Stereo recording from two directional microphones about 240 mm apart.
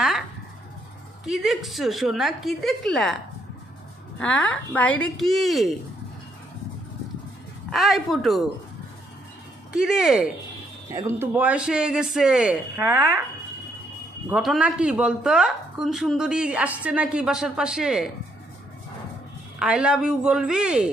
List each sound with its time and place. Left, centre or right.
1.2 s a woman's voice: centre
4.2 s a woman's voice: centre
7.7 s a woman's voice: centre
9.7 s a woman's voice: centre
14.3 s a woman's voice: centre
19.6 s a woman's voice: centre